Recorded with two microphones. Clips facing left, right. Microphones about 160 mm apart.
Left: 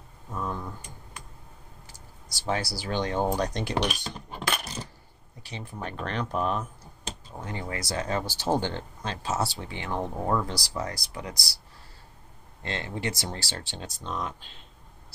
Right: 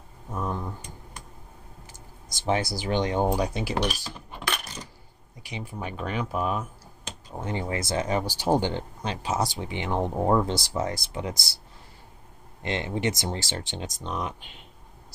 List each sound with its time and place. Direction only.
0.3 s speech: 20° right (ahead or behind)
1.9 s speech: 20° right (ahead or behind); by 4.1 s 5° right (ahead or behind)
5.4 s speech: 10° right (ahead or behind)
7.3 s speech: 20° right (ahead or behind)
12.6 s speech: 20° right (ahead or behind)